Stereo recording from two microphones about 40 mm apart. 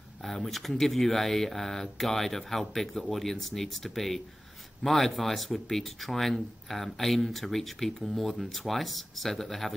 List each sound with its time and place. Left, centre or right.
0.2 s speech: centre